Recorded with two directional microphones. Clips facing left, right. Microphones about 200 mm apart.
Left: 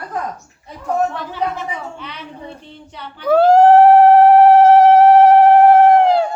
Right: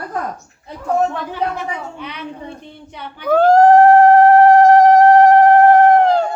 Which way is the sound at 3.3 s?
10° left (ahead or behind).